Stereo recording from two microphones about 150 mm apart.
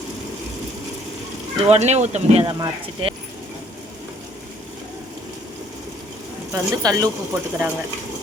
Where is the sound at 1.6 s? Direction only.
50° right (ahead or behind).